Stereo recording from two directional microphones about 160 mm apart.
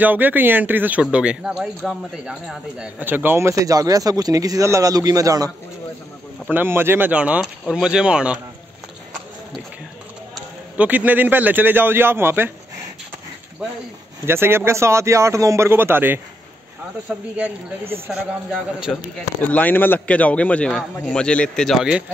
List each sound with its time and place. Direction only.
0.0 s a man's voice: 10° right (ahead or behind)
6.5 s speech: 15° right (ahead or behind)
10.3 s a man's voice: 10° right (ahead or behind)
14.2 s speech: 15° right (ahead or behind)
17.4 s speech: 15° right (ahead or behind)
18.9 s a man's voice: 5° left (ahead or behind)